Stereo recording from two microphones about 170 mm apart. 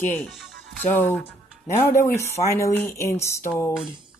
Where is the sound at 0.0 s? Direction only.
10° left (ahead or behind).